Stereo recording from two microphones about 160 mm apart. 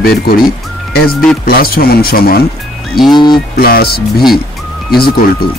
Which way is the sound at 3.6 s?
70° left (ahead or behind).